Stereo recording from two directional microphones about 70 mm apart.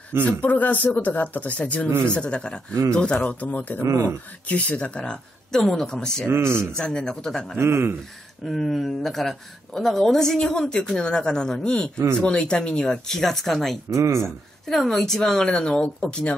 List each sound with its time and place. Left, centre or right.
0.4 s speech: left
1.9 s speech: right
2.1 s speech: centre
3.8 s speech: right
4.5 s speech: centre
6.3 s speech: right
6.8 s speech: centre
7.5 s speech: right
8.5 s speech: centre
13.8 s speech: right
14.2 s speech: centre